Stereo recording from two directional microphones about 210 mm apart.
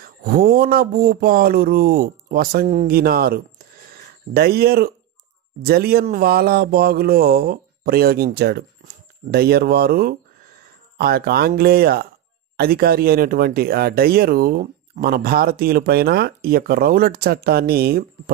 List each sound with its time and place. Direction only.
0.0 s speech: 45° right (ahead or behind)